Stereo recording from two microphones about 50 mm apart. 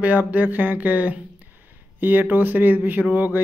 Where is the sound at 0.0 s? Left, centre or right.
Right.